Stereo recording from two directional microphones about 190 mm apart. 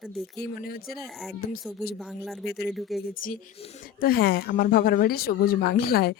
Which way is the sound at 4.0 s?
55° left (ahead or behind).